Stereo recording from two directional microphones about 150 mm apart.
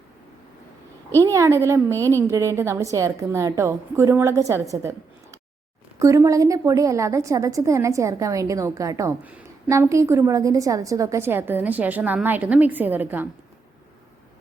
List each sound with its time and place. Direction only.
1.1 s a woman's voice: 20° right (ahead or behind)
6.0 s a woman's voice: 20° right (ahead or behind)